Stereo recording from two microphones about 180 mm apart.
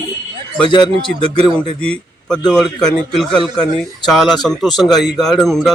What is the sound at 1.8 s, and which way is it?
A man's voice, 5° left (ahead or behind).